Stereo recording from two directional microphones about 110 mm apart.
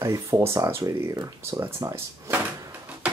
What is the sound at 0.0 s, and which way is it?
Speech, 30° right (ahead or behind).